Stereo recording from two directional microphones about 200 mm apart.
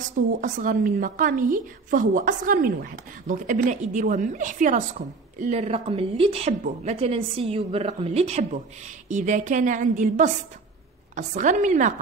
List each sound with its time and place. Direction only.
0.4 s a woman's voice: 40° right (ahead or behind)